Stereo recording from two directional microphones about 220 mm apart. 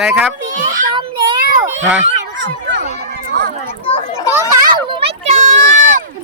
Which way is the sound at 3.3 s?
45° right (ahead or behind).